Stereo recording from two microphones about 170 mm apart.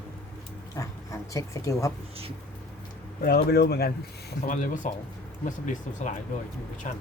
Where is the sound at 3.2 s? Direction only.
65° left (ahead or behind).